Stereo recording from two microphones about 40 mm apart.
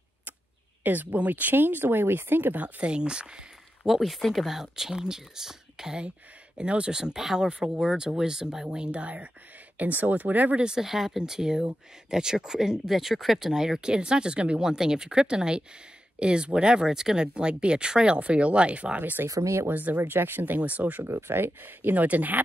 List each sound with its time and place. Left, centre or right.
0.8 s speech: right
2.6 s speech: right
3.8 s speech: centre
6.6 s speech: right
9.8 s speech: right
10.5 s speech: right
10.8 s speech: centre
13.5 s speech: centre
14.6 s speech: centre
18.9 s speech: right
20.0 s speech: right
20.4 s speech: right
21.0 s speech: right
21.9 s speech: right